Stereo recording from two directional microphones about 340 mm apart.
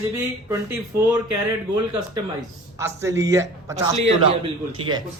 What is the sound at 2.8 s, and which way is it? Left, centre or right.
Speech, centre.